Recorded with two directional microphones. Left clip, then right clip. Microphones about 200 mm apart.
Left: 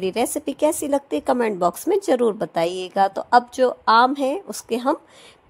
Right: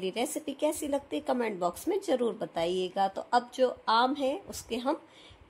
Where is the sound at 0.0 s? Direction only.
35° left (ahead or behind).